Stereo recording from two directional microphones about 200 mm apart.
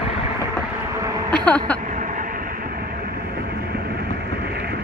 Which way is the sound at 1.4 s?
5° left (ahead or behind).